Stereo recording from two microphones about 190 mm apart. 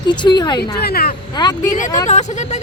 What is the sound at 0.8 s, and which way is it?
Speech, 55° left (ahead or behind).